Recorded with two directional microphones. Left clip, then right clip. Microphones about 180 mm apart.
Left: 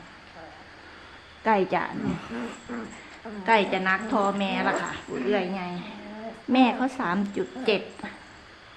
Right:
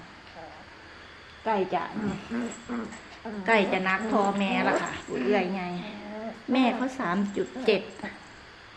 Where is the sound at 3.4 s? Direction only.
10° left (ahead or behind).